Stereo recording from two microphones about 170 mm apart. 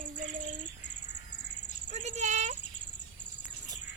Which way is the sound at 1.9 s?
45° right (ahead or behind).